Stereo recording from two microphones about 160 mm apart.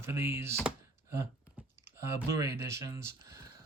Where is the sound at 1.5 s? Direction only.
15° right (ahead or behind).